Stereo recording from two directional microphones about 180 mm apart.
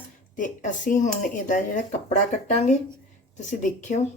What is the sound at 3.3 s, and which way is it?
Speech, 40° left (ahead or behind).